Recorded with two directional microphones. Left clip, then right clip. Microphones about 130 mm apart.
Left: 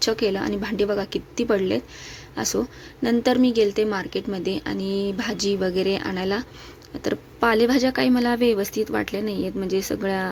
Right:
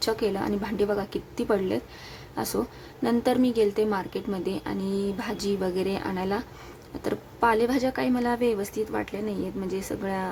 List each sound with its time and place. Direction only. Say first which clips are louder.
0.0 s a woman's voice: left 4 dB; 20° left (ahead or behind)